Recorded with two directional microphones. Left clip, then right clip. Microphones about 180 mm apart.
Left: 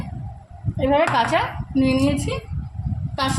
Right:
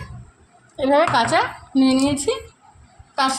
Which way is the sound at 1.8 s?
50° right (ahead or behind).